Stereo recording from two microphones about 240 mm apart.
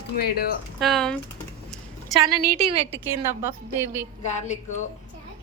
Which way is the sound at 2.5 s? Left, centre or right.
Right.